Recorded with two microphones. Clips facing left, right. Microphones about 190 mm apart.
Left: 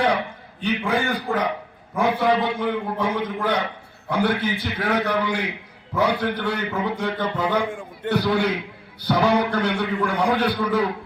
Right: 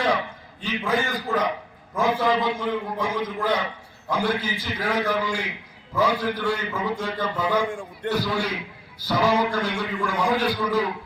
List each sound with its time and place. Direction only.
0.6 s a man's voice: 65° left (ahead or behind)